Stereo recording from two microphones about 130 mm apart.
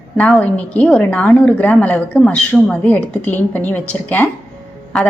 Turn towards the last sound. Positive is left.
turn(degrees=0)  # may be behind; listen again after turning